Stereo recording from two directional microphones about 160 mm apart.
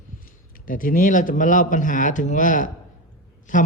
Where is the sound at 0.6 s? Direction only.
60° left (ahead or behind).